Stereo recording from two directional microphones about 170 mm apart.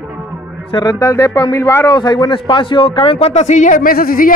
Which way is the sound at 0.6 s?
25° left (ahead or behind).